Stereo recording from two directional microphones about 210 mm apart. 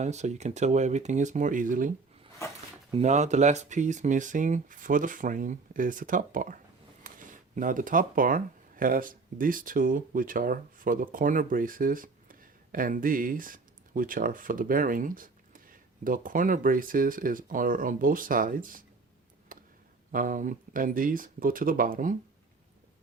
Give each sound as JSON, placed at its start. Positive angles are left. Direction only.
{"t": 0.0, "sound": "speech", "side_deg": -35}
{"t": 2.9, "sound": "speech", "side_deg": -35}
{"t": 19.5, "sound": "tick", "side_deg": -40}
{"t": 20.1, "sound": "speech", "side_deg": -40}